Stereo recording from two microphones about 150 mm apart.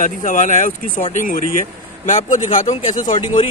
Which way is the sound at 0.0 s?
60° left (ahead or behind).